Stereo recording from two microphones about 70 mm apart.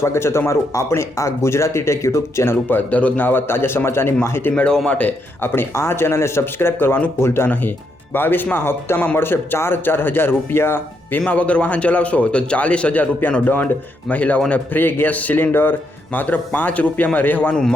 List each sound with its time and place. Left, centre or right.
0.0 s speech: left
4.5 s a man's voice: centre
5.4 s a man's voice: left
11.3 s a man's voice: centre
17.5 s a man's voice: centre